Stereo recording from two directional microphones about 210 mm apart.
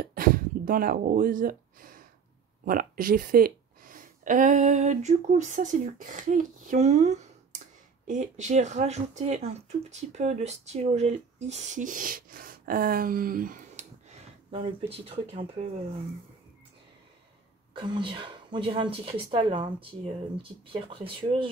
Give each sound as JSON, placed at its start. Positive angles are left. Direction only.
{"t": 0.0, "sound": "a sound", "side_deg": -45}
{"t": 2.6, "sound": "speech", "side_deg": -40}
{"t": 17.7, "sound": "speech", "side_deg": -20}